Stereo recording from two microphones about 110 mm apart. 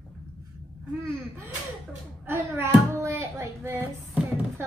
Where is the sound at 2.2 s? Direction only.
25° right (ahead or behind).